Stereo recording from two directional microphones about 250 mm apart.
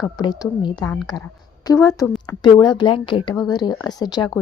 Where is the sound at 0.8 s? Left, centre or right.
Centre.